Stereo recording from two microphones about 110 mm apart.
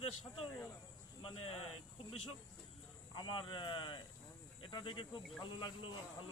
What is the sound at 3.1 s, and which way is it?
Speech, 45° left (ahead or behind).